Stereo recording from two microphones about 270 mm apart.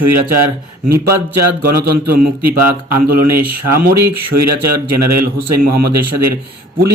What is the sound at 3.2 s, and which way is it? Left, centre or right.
Speech, right.